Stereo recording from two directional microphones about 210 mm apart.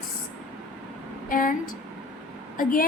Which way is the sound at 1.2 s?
40° left (ahead or behind).